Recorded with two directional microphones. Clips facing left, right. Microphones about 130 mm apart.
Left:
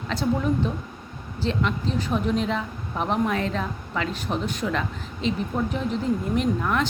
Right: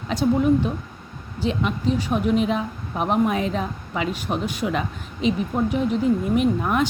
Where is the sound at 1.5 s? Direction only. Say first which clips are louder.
Right 3 dB; 10° right (ahead or behind).